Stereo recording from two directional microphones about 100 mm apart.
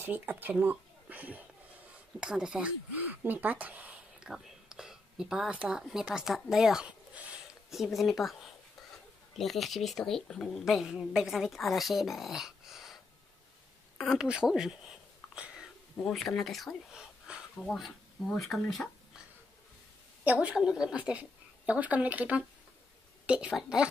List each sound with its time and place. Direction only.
0.0 s a woman's voice: 20° right (ahead or behind); by 13.0 s centre (ahead or behind)
14.1 s a woman's voice: 5° right (ahead or behind)
15.3 s a sound: 10° right (ahead or behind)
16.0 s a woman's voice: 5° left (ahead or behind)
20.2 s a woman's voice: 10° right (ahead or behind)